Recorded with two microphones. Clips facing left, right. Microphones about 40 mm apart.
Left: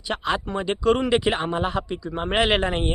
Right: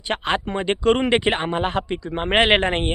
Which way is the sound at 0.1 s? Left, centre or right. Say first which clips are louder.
Right 2 dB; right.